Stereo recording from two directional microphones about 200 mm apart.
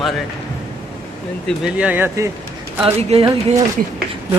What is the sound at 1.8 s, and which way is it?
Speech, 10° right (ahead or behind).